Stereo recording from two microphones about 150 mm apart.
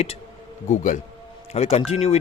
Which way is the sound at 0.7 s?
55° left (ahead or behind).